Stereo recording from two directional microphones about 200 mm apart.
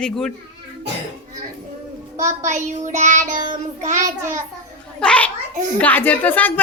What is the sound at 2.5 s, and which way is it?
Child singing, 35° right (ahead or behind).